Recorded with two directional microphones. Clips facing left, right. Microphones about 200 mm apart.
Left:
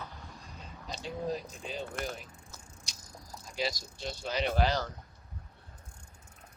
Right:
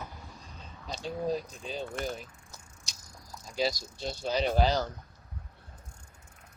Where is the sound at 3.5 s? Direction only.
35° right (ahead or behind).